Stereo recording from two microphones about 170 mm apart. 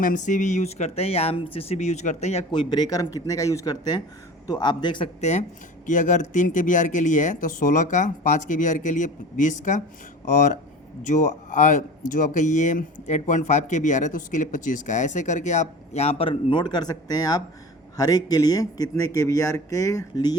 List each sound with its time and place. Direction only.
0.0 s speech: 50° left (ahead or behind)
2.6 s speech: 25° left (ahead or behind)
5.2 s speech: 40° left (ahead or behind); by 20.3 s 20° left (ahead or behind)